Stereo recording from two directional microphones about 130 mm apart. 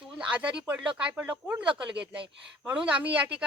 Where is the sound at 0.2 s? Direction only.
10° right (ahead or behind).